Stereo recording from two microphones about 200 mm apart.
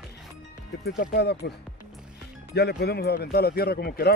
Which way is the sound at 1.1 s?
55° left (ahead or behind).